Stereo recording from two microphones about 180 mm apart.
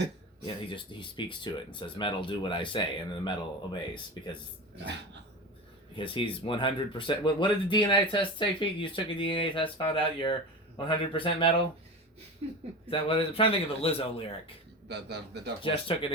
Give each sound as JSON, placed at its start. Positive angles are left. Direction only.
{"t": 0.4, "sound": "speech", "side_deg": 25}
{"t": 6.0, "sound": "speech", "side_deg": 30}
{"t": 12.4, "sound": "speech", "side_deg": -35}
{"t": 12.9, "sound": "a man's voice", "side_deg": 30}
{"t": 14.8, "sound": "a man's voice", "side_deg": -70}
{"t": 15.6, "sound": "speech", "side_deg": 30}